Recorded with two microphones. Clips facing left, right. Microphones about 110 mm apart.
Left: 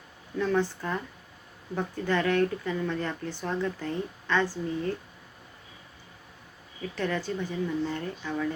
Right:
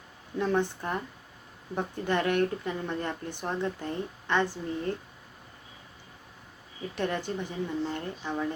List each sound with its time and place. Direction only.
0.3 s speech: 20° right (ahead or behind)
6.9 s speech: 20° right (ahead or behind)